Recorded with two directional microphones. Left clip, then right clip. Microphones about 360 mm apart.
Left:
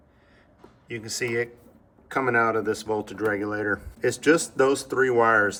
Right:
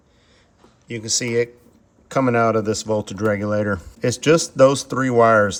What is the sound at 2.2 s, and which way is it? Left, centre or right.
Speech, right.